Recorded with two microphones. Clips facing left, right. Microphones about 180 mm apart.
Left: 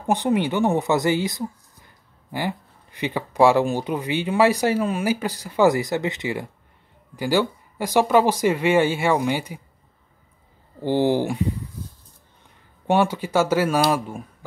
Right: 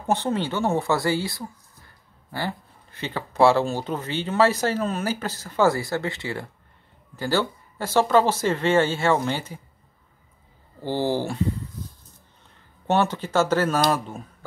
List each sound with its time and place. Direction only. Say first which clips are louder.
0.0 s speech: left 3 dB; 15° left (ahead or behind)
10.8 s speech: left 5 dB; 15° left (ahead or behind)
11.8 s a sound: left 1 dB; 10° left (ahead or behind)
12.8 s speech: left 2 dB; 10° left (ahead or behind)